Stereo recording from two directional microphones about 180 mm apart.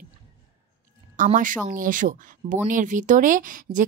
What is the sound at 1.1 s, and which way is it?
Speech, 45° right (ahead or behind).